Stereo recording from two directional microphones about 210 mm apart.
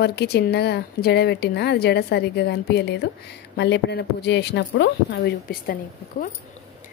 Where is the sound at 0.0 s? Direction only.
50° left (ahead or behind).